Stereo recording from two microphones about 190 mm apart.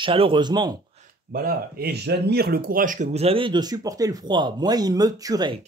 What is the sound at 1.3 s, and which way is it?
Speech, 55° right (ahead or behind).